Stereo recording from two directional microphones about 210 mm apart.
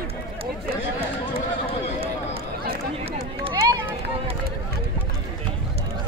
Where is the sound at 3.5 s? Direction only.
15° right (ahead or behind).